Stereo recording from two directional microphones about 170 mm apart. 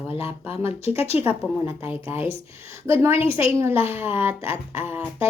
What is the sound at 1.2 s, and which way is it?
A woman's voice, 10° right (ahead or behind).